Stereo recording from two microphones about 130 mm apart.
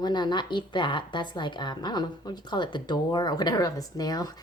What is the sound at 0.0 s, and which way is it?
A woman's voice, 35° left (ahead or behind).